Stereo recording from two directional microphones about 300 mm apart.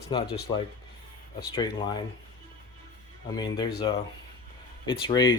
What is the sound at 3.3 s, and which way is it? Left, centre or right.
Speech, centre.